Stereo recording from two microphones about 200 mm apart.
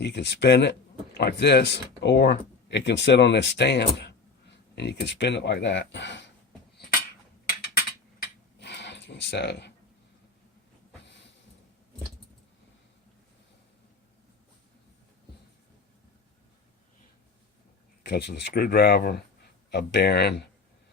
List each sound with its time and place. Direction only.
0.0 s speech: 60° left (ahead or behind)
8.5 s a sound: 60° left (ahead or behind)
18.0 s speech: 55° left (ahead or behind)